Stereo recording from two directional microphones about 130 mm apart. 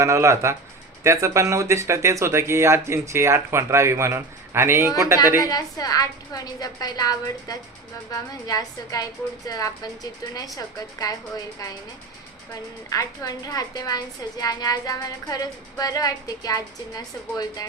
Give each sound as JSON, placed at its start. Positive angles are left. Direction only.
{"t": 0.0, "sound": "speech", "side_deg": -20}
{"t": 5.4, "sound": "a woman's voice", "side_deg": 30}
{"t": 12.9, "sound": "a woman's voice", "side_deg": 30}